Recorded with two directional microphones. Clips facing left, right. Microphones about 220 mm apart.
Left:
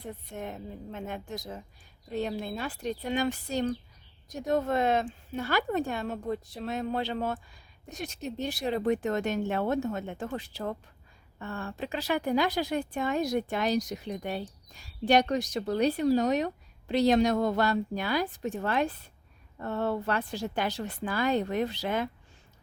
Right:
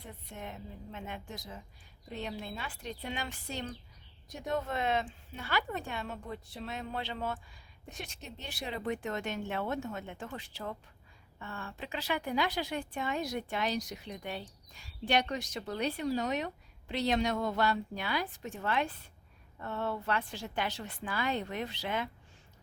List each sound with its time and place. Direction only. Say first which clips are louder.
0.0 s speech: left 7 dB; 40° left (ahead or behind)